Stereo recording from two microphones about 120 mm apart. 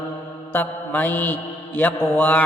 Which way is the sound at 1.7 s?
10° left (ahead or behind).